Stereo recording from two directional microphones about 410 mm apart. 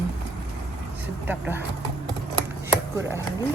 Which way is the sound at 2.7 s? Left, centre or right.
Centre.